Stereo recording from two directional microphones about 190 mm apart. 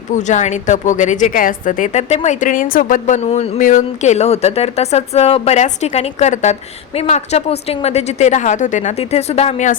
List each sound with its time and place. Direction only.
0.1 s a woman's voice: 40° left (ahead or behind)